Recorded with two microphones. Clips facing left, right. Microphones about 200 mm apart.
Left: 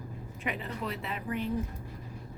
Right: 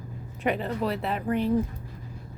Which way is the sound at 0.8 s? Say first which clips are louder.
Right 8 dB; 35° right (ahead or behind).